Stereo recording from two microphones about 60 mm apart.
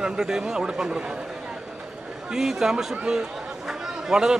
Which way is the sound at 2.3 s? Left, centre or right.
Centre.